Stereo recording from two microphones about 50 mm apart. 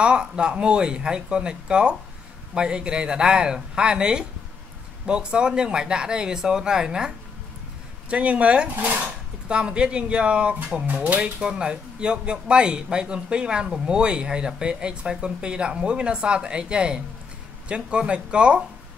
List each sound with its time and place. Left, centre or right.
0.0 s speech: centre
9.5 s speech: right